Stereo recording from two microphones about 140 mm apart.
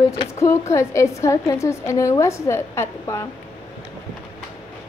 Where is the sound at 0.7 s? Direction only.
20° left (ahead or behind).